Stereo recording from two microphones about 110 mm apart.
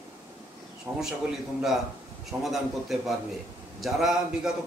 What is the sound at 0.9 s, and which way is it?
Speech, 25° right (ahead or behind).